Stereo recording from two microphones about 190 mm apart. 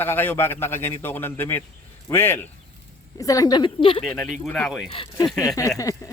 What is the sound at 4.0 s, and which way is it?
Speech, 5° left (ahead or behind).